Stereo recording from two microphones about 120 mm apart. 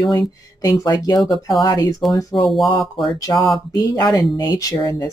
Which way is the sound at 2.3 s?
Centre (ahead or behind).